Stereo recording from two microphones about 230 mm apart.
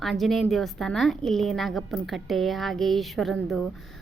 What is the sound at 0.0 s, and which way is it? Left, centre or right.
Speech, centre.